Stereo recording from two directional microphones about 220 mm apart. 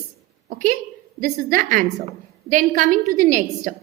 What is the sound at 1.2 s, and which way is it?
A woman's voice, 40° right (ahead or behind).